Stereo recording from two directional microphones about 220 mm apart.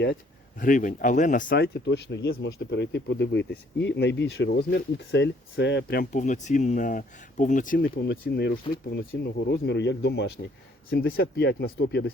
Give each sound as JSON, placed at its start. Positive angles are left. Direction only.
{"t": 0.6, "sound": "speech", "side_deg": 35}